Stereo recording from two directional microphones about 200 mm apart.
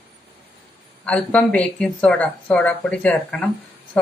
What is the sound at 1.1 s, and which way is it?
Speech, 5° left (ahead or behind).